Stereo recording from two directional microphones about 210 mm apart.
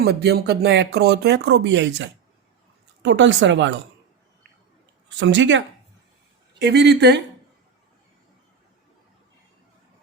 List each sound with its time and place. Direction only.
0.0 s a woman's voice: 50° right (ahead or behind)
5.0 s a woman's voice: 60° right (ahead or behind)